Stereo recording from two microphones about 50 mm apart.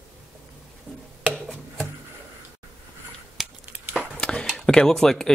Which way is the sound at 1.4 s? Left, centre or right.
Centre.